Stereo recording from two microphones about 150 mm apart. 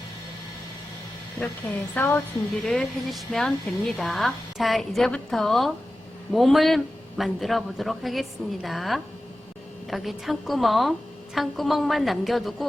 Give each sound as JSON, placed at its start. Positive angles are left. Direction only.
{"t": 1.4, "sound": "a woman's voice", "side_deg": 10}